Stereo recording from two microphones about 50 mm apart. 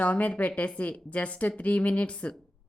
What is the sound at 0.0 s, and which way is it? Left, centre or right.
A woman's voice, left.